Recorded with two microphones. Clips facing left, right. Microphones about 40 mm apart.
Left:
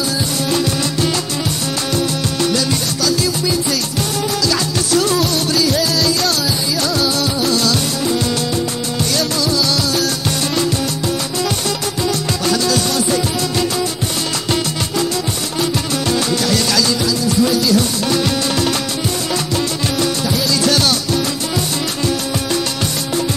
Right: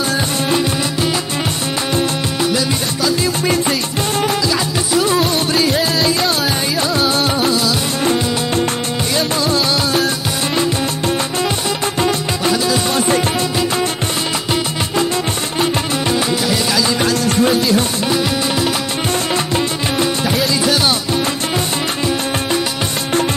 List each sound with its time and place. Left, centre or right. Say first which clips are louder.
0.5 s music: even; centre
2.4 s music: even; centre
4.5 s music: even; centre
5.1 s music: right 1 dB; right
12.4 s music: right 1 dB; right
12.9 s music: right 2 dB; right
16.1 s music: left 1 dB; centre
17.0 s music: right 1 dB; right
19.3 s music: right 2 dB; right
20.6 s music: even; centre